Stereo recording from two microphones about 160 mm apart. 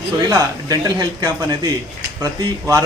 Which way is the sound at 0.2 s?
25° right (ahead or behind).